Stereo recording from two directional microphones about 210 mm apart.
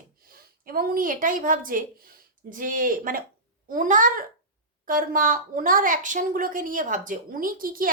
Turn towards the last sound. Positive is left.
turn(degrees=-40)  # may be behind; listen again after turning